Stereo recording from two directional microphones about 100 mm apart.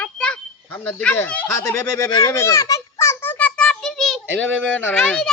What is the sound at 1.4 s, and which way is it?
Speech, 30° left (ahead or behind).